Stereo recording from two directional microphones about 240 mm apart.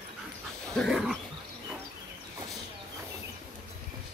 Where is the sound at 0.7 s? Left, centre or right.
Centre.